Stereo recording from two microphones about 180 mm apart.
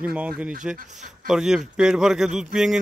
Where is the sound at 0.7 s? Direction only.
45° right (ahead or behind).